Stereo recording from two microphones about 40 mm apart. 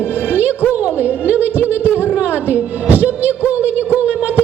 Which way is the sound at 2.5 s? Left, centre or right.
Right.